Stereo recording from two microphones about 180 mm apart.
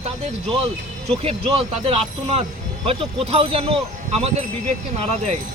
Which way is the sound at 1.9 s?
35° right (ahead or behind).